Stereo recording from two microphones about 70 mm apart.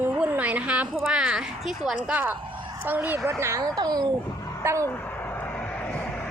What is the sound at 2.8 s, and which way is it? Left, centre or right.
Speech, right.